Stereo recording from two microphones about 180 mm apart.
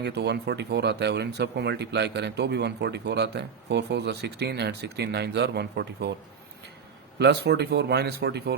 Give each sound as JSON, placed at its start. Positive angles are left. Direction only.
{"t": 0.0, "sound": "speech", "side_deg": -70}
{"t": 7.2, "sound": "speech", "side_deg": -70}